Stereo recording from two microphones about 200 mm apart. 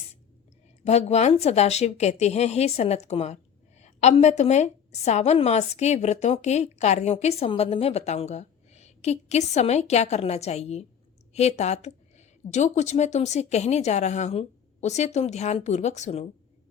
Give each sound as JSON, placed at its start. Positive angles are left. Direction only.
{"t": 0.9, "sound": "a woman's voice", "side_deg": 35}